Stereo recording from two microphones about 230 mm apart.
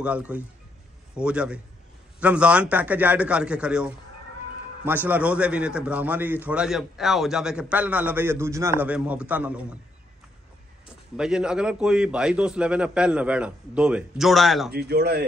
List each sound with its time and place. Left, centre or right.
0.0 s a man's voice: centre
11.1 s a man's voice: centre
14.7 s speech: right